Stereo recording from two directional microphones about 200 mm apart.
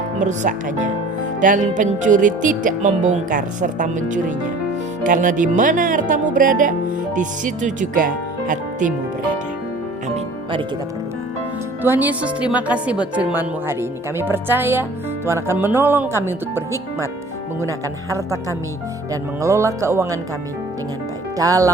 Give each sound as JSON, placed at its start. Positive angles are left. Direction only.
{"t": 0.2, "sound": "speech", "side_deg": -40}
{"t": 11.8, "sound": "speech", "side_deg": -10}
{"t": 17.7, "sound": "speech", "side_deg": -15}
{"t": 21.3, "sound": "speech", "side_deg": -15}